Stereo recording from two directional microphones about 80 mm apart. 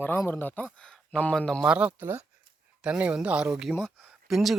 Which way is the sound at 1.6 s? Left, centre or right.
Centre.